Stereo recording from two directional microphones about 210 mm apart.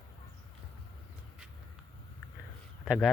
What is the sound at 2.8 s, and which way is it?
Speech, centre (ahead or behind).